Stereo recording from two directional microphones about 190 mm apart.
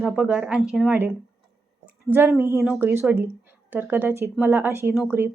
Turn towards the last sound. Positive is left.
turn(degrees=-10)  # may be behind; listen again after turning